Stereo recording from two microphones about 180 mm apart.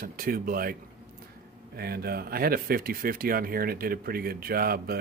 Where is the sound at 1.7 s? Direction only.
60° right (ahead or behind).